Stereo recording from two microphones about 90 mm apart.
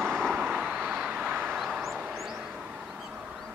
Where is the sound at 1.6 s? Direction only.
5° right (ahead or behind).